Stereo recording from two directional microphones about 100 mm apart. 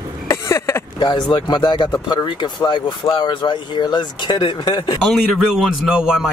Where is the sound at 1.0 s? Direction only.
45° left (ahead or behind).